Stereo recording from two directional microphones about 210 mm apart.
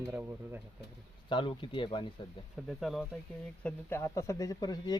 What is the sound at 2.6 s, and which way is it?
Speech, centre (ahead or behind).